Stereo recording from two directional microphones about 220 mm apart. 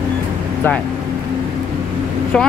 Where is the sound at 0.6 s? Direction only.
10° left (ahead or behind).